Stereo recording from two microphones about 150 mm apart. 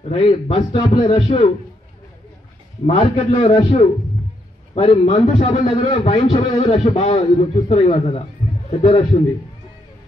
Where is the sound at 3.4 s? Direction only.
30° left (ahead or behind).